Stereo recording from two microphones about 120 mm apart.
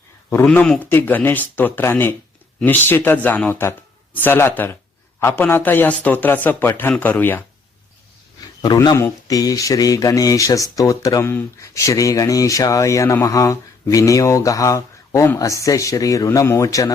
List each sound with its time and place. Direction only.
0.4 s a man's voice: 10° left (ahead or behind)
8.6 s speech: 35° left (ahead or behind)
9.0 s speech: 25° left (ahead or behind)